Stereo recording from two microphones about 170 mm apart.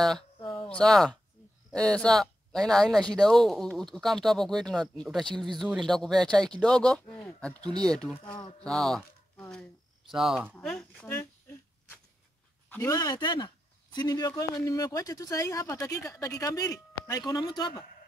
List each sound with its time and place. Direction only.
0.4 s a sound: 30° left (ahead or behind)
0.7 s speech: 5° left (ahead or behind)
8.4 s speech: 35° left (ahead or behind)
8.6 s speech: 5° left (ahead or behind)
10.5 s a sound: 5° left (ahead or behind)
12.9 s speech: 25° left (ahead or behind)